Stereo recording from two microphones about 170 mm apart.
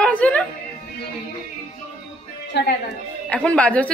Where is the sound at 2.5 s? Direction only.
80° left.